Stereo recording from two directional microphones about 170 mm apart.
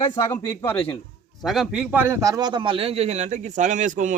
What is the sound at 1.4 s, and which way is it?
A man's voice, centre (ahead or behind).